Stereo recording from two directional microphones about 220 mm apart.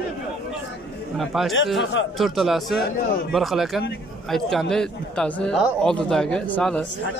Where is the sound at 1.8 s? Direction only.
55° left (ahead or behind).